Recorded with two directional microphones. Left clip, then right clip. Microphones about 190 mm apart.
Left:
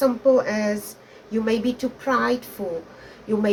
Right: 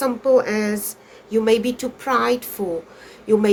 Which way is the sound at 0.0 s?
50° right (ahead or behind).